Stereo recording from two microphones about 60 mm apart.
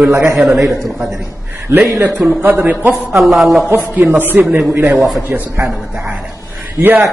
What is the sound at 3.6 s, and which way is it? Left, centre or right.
A man's voice, right.